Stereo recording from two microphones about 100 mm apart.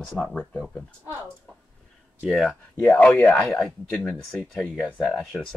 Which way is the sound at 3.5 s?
5° left (ahead or behind).